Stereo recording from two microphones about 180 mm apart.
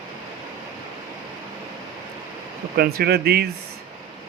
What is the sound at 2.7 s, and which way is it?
Speech, 60° right (ahead or behind).